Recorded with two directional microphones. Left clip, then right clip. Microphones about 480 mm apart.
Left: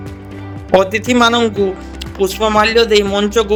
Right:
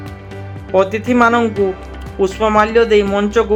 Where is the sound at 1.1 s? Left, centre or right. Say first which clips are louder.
Even; centre.